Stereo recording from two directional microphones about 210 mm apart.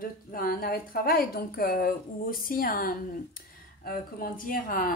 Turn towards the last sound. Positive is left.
turn(degrees=40)  # may be behind; listen again after turning